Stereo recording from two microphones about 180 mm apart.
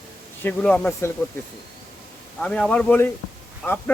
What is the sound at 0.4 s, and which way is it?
Speech, 10° left (ahead or behind).